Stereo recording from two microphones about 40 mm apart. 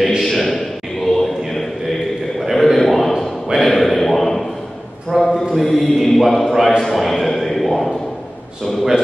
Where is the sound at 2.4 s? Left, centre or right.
Centre.